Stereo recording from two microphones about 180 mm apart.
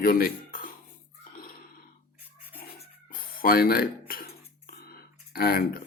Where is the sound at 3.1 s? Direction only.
55° left (ahead or behind).